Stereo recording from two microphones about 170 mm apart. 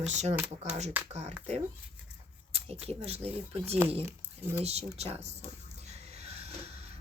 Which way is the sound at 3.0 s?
35° right (ahead or behind).